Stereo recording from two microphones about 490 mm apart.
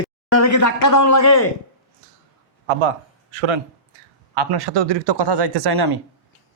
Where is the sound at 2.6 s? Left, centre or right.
Right.